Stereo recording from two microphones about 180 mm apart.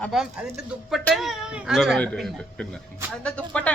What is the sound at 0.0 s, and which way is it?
Speech, centre (ahead or behind).